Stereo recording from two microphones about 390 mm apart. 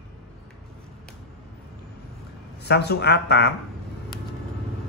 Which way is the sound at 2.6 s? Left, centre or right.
Left.